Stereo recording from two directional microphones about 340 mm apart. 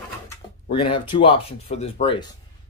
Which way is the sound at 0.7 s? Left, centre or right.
Centre.